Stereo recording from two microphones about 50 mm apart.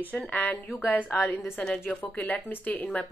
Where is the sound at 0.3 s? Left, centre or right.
Left.